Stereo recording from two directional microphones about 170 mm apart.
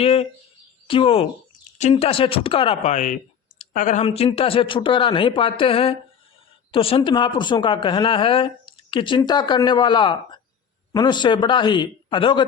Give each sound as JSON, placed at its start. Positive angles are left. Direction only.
{"t": 0.0, "sound": "a woman's voice", "side_deg": 35}
{"t": 2.9, "sound": "speech", "side_deg": 50}
{"t": 4.0, "sound": "a woman's voice", "side_deg": 35}